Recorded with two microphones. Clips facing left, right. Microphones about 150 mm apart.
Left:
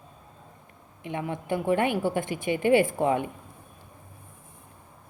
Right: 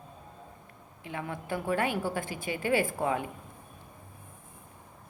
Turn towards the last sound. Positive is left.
turn(degrees=25)  # may be behind; listen again after turning